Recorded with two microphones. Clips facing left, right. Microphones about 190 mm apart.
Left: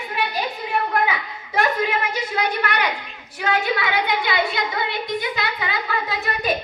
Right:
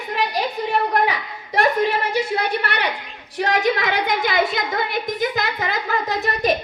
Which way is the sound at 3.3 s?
35° right (ahead or behind).